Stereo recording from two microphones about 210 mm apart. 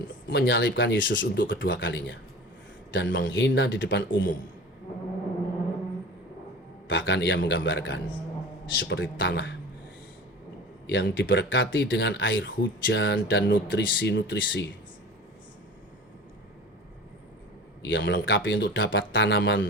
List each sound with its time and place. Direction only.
0.3 s speech: 60° left (ahead or behind)
6.8 s speech: 60° left (ahead or behind)
10.8 s speech: 60° left (ahead or behind)
17.8 s speech: 60° left (ahead or behind)